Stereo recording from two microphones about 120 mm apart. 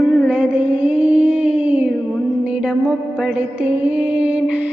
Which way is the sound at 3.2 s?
10° right (ahead or behind).